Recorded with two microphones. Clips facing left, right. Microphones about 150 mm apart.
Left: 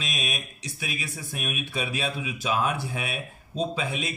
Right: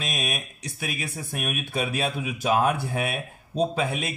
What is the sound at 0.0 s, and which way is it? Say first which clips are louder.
Speech: right 3 dB; 55° right (ahead or behind).